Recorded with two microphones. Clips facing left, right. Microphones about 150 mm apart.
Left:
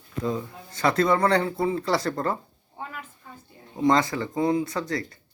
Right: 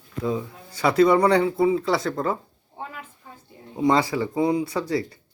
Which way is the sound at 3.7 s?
10° right (ahead or behind).